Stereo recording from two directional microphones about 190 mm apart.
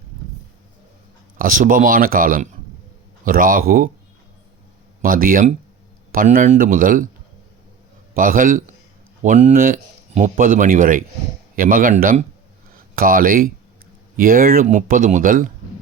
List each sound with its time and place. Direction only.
1.4 s speech: 45° right (ahead or behind)
5.0 s speech: 50° right (ahead or behind)
8.1 s speech: 45° right (ahead or behind)